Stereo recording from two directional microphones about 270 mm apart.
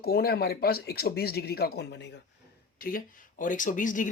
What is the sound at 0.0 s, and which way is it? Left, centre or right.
Speech, left.